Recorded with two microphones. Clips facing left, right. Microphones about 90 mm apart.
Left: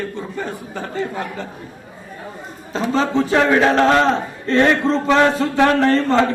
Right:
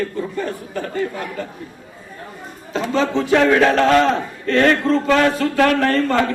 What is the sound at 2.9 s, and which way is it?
A man's voice, 35° left (ahead or behind).